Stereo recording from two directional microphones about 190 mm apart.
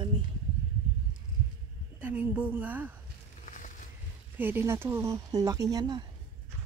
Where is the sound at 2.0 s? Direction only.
10° right (ahead or behind).